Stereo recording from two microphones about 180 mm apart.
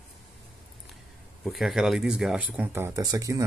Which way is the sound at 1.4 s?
Centre (ahead or behind).